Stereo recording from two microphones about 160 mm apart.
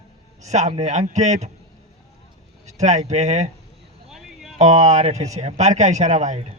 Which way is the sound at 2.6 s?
45° right (ahead or behind).